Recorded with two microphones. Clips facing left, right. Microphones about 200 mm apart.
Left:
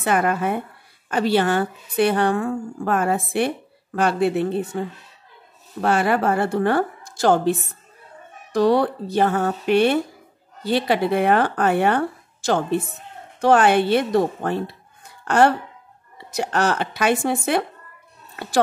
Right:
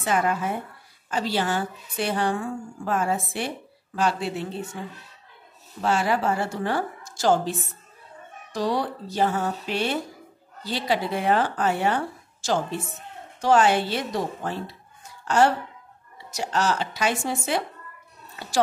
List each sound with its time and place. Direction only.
0.0 s a woman's voice: 60° left (ahead or behind)
8.5 s a woman's voice: 60° left (ahead or behind)